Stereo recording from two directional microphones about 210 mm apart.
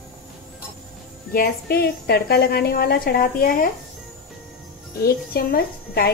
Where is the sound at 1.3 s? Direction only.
50° left (ahead or behind).